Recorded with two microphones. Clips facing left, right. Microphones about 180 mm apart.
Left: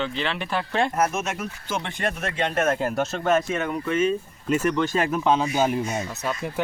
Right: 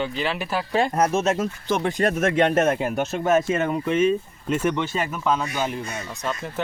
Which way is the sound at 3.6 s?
30° right (ahead or behind).